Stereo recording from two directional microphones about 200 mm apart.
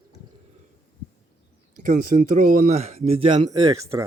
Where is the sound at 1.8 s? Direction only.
40° right (ahead or behind); by 4.0 s 20° right (ahead or behind).